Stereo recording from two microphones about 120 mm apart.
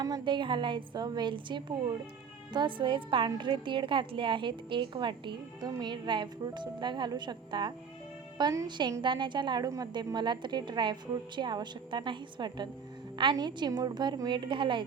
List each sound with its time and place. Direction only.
0.0 s a woman's voice: 35° right (ahead or behind)